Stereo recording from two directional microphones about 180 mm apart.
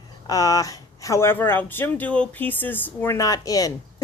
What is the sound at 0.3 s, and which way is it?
A woman's voice, 20° left (ahead or behind).